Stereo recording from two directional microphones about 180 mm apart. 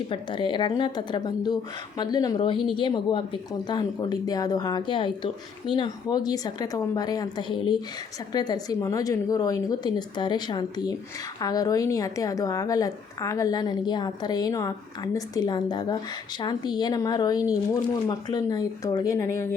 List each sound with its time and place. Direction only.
0.1 s a woman's voice: 25° left (ahead or behind)